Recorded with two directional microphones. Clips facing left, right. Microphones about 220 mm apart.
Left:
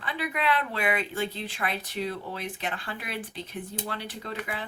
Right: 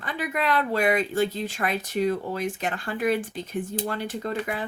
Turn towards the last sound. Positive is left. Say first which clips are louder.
# right 7 dB
turn(degrees=-45)  # may be behind; listen again after turning